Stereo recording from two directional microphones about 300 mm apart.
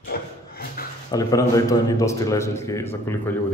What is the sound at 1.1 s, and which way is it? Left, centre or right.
A man's voice, centre.